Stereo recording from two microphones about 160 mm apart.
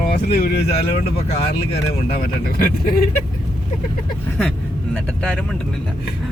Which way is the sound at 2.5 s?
65° left (ahead or behind).